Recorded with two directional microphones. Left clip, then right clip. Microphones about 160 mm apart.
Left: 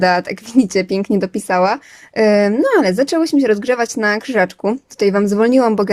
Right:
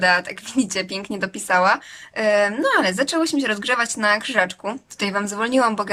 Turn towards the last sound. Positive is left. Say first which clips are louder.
# left 6 dB
turn(degrees=35)  # may be behind; listen again after turning